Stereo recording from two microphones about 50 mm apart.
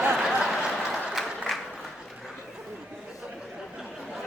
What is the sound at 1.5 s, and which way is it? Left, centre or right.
Applause, centre.